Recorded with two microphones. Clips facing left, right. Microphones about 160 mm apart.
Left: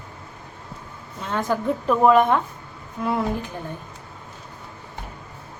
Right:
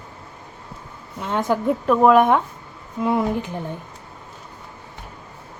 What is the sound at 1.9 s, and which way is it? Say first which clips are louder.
Speech: right 2 dB; centre (ahead or behind).